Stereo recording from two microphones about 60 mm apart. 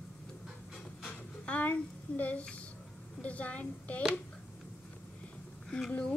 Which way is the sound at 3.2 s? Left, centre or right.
Left.